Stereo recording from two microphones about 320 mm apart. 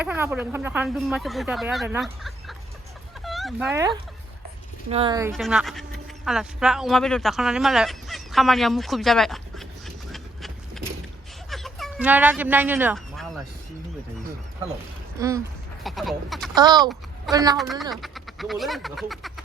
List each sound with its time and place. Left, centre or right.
0.0 s speech: centre
5.3 s speech: centre
11.5 s a sound: centre
15.2 s speech: centre
16.6 s speech: centre
17.6 s speech: centre